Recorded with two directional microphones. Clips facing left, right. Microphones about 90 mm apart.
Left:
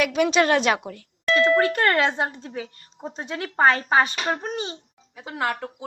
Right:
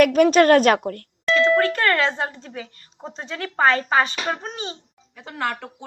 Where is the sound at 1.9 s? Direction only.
15° left (ahead or behind).